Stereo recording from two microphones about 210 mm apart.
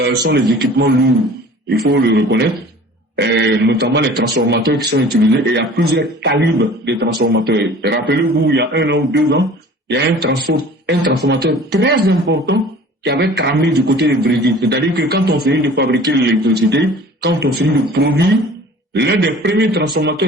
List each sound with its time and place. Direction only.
0.0 s a man's voice: 55° right (ahead or behind)